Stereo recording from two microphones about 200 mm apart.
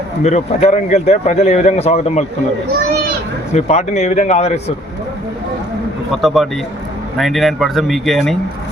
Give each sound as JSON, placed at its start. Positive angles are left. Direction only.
{"t": 0.2, "sound": "a man's voice", "side_deg": 35}
{"t": 3.5, "sound": "a man's voice", "side_deg": 35}
{"t": 6.1, "sound": "speech", "side_deg": 0}